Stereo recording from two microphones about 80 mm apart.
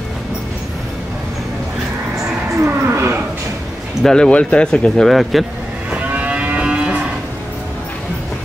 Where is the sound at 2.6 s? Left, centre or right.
Right.